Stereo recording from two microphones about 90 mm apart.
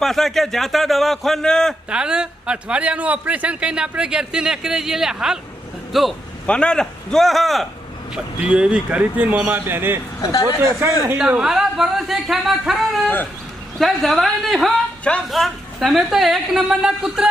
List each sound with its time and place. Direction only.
0.0 s a woman's voice: 5° left (ahead or behind)
1.9 s a man's voice: 10° right (ahead or behind)
6.4 s a woman's voice: 10° left (ahead or behind)
8.1 s a man's voice: 10° right (ahead or behind)
10.2 s speech: 40° left (ahead or behind)
10.6 s speech: 30° right (ahead or behind)
11.2 s a woman's voice: 10° right (ahead or behind)